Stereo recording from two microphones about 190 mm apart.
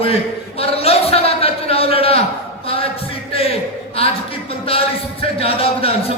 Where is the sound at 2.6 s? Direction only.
30° left (ahead or behind).